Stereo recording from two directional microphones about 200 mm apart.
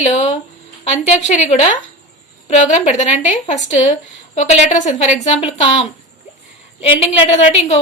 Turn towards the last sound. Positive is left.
turn(degrees=35)  # may be behind; listen again after turning